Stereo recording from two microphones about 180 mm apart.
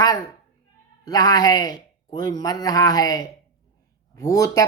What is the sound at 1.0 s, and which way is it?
Speech, 20° left (ahead or behind).